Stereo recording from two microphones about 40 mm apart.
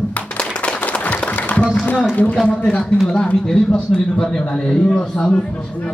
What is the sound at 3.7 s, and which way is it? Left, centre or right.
A man's voice, centre.